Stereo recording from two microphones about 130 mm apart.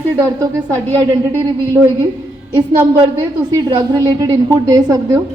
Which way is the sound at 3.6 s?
30° right (ahead or behind).